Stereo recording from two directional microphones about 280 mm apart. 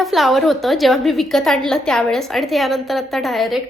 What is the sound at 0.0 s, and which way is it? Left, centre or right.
A woman's voice, centre.